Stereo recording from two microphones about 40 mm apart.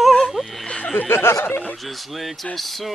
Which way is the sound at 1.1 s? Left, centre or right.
Left.